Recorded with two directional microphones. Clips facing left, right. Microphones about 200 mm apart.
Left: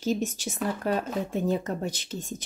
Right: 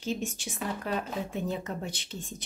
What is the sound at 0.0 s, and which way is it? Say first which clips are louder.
Speech: left 5 dB; 40° left (ahead or behind).